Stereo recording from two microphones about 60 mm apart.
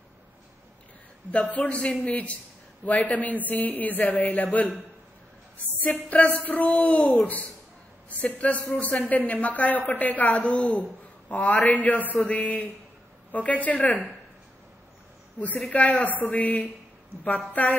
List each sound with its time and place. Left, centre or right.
1.3 s a man's voice: left
6.0 s a man's voice: left
15.3 s a woman's voice: left